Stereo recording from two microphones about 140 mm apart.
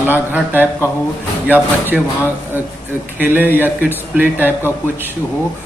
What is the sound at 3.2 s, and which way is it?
Speech, 15° right (ahead or behind).